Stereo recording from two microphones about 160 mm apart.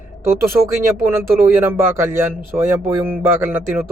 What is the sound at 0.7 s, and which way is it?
Speech, 15° right (ahead or behind).